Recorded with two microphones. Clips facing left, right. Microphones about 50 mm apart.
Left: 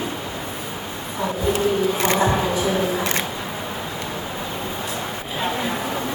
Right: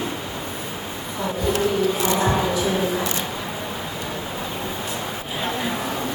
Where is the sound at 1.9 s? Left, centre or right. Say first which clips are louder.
Left 1 dB; left.